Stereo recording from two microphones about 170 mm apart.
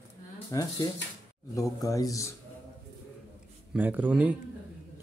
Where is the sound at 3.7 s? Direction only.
10° right (ahead or behind).